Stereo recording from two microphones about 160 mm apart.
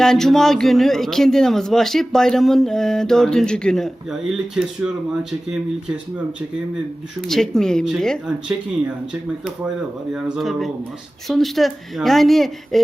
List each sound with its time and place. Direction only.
0.0 s a man's voice: centre (ahead or behind)
7.3 s a man's voice: 5° left (ahead or behind)
10.1 s a man's voice: 5° right (ahead or behind)